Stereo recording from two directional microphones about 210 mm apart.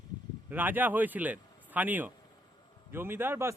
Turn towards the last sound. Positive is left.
turn(degrees=-10)  # may be behind; listen again after turning